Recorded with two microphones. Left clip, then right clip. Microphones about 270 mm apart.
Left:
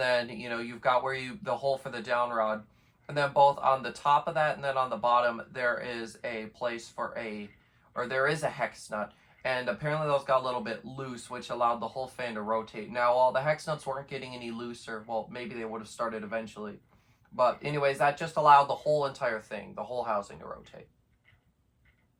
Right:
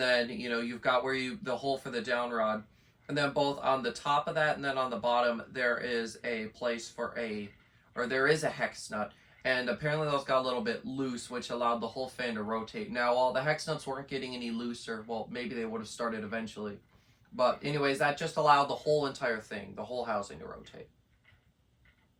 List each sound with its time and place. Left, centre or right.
0.0 s speech: centre